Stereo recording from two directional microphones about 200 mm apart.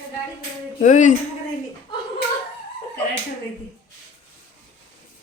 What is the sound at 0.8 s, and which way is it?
Speech, 40° left (ahead or behind).